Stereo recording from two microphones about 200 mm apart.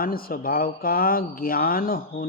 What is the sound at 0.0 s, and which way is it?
Speech, 45° left (ahead or behind).